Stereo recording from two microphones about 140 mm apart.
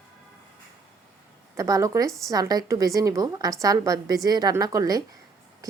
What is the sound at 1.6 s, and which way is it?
A woman's voice, 25° right (ahead or behind).